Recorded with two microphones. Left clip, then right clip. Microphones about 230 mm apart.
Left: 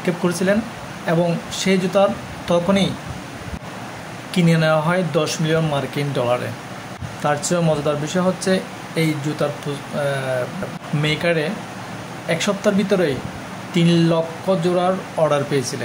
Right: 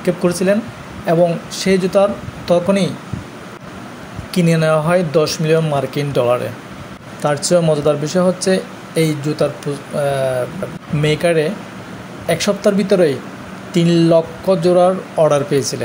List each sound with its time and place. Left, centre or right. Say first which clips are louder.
0.0 s speech: right 4 dB; centre
4.3 s speech: right 3 dB; centre